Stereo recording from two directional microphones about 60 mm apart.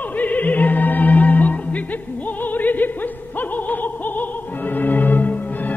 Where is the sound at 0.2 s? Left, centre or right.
Left.